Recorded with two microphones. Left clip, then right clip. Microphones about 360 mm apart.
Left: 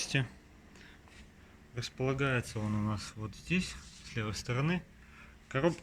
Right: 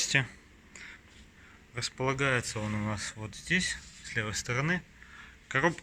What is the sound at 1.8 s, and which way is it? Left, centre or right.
Speech, centre.